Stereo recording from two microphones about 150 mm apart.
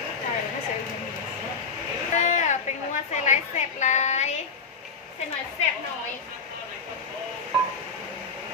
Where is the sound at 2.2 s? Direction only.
55° left (ahead or behind).